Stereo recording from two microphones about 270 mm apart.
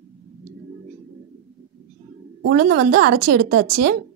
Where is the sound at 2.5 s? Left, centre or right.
Right.